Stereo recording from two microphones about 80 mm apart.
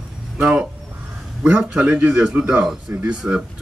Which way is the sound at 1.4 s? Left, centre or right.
Centre.